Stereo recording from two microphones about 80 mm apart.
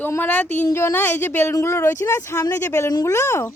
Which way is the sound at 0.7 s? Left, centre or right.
Left.